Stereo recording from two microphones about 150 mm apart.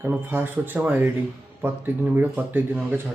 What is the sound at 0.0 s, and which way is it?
Speech, 15° right (ahead or behind).